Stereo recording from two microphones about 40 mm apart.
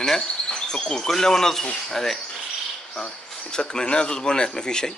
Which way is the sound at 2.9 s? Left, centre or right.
Centre.